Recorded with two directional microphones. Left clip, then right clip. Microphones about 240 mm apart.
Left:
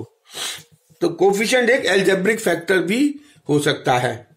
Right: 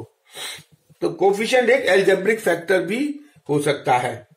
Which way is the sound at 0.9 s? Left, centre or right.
Left.